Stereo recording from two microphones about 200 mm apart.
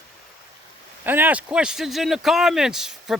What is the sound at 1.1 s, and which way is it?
Speech, 10° right (ahead or behind).